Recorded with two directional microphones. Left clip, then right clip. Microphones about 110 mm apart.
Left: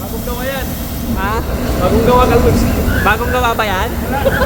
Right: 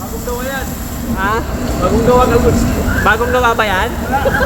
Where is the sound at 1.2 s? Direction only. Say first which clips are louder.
Right 2 dB; 15° right (ahead or behind).